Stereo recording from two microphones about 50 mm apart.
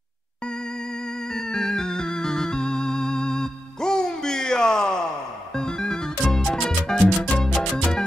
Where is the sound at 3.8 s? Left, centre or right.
Centre.